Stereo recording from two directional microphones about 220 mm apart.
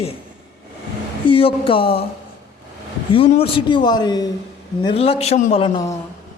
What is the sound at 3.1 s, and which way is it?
A man's voice, 25° left (ahead or behind).